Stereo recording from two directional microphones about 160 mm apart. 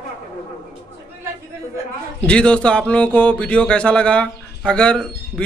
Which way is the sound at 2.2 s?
5° left (ahead or behind).